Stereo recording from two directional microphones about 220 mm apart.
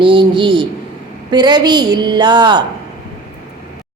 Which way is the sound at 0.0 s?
20° right (ahead or behind).